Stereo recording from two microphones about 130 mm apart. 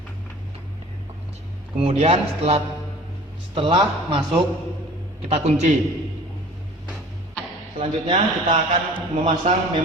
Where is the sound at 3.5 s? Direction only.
40° right (ahead or behind).